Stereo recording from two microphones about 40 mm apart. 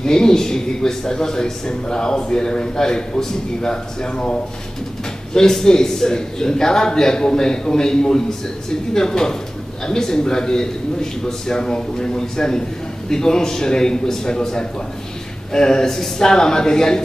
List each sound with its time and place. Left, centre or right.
0.0 s a man's voice: centre